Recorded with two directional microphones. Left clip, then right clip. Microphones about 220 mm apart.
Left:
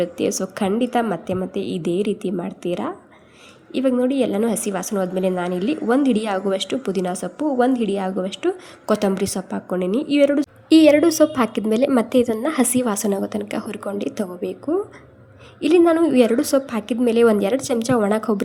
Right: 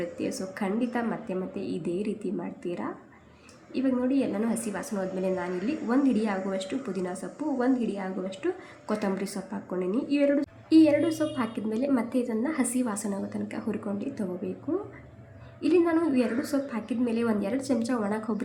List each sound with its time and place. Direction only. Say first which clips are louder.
0.0 s a woman's voice: left 11 dB; 40° left (ahead or behind)
15.6 s a woman's voice: left 9 dB; 40° left (ahead or behind)